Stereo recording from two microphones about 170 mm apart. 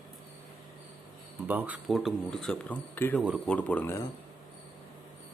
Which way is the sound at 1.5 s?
10° right (ahead or behind).